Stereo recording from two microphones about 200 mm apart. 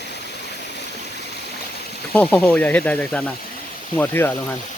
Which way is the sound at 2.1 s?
5° left (ahead or behind).